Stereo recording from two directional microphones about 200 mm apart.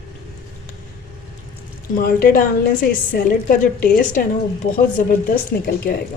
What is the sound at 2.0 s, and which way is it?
A woman's voice, 45° left (ahead or behind).